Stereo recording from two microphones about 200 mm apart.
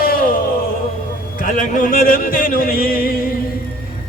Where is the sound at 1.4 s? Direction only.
40° left (ahead or behind).